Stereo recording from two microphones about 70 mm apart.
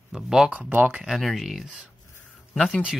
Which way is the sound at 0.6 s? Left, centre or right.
Right.